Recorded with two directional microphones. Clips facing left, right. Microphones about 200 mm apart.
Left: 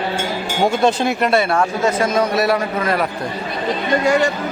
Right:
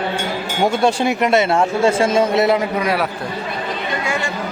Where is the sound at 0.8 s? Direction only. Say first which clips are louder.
Even; 15° right (ahead or behind).